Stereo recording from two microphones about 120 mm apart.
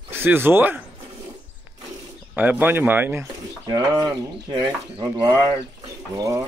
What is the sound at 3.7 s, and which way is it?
Speech, 35° right (ahead or behind).